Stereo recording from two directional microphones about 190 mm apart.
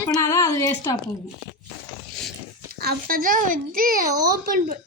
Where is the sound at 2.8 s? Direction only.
55° right (ahead or behind).